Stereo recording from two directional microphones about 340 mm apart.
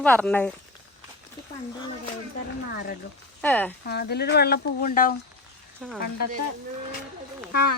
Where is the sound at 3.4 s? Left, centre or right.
Centre.